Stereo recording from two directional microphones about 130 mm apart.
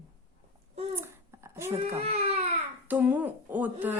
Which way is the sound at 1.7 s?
55° right (ahead or behind).